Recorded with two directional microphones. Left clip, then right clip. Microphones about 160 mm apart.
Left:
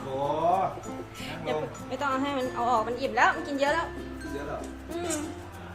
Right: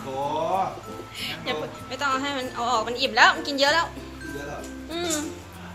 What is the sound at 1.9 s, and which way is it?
Speech, 15° left (ahead or behind).